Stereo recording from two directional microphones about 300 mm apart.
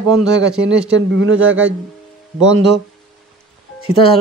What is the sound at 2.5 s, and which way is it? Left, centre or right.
Speech, right.